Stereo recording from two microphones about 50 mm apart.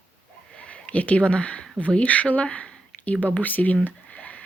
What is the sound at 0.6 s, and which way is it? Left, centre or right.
Speech, left.